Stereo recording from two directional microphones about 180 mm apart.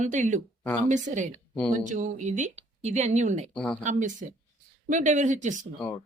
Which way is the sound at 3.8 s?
45° right (ahead or behind).